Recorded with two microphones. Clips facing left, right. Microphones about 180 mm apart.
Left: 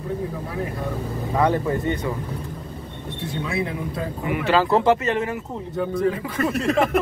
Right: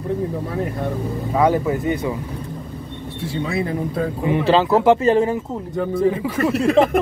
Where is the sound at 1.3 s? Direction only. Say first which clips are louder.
Right 3 dB; 10° right (ahead or behind).